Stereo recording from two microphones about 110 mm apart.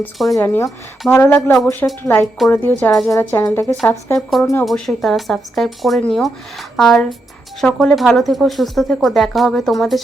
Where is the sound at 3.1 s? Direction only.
25° left (ahead or behind).